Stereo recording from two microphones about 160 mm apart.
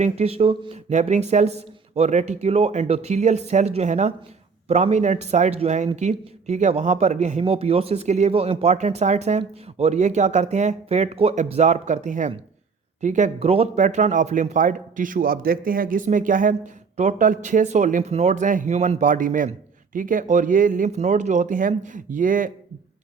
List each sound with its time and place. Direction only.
0.0 s speech: 40° right (ahead or behind); by 22.5 s 55° right (ahead or behind)